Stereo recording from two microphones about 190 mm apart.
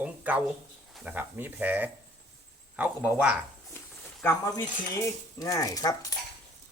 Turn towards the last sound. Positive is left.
turn(degrees=20)  # may be behind; listen again after turning